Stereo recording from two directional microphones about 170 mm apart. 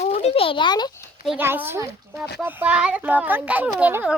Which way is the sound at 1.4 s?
10° right (ahead or behind).